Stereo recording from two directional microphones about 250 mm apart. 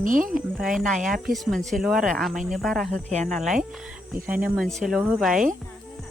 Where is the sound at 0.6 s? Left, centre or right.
Centre.